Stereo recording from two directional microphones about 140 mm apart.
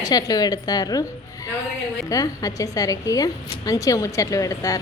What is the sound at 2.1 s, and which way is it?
A woman's voice, 25° left (ahead or behind).